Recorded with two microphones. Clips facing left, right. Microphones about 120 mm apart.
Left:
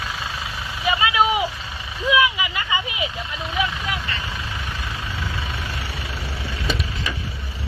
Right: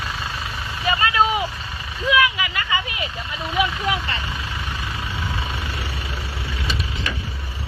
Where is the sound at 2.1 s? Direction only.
20° left (ahead or behind).